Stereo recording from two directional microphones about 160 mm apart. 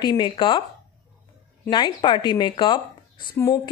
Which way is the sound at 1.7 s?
30° left (ahead or behind).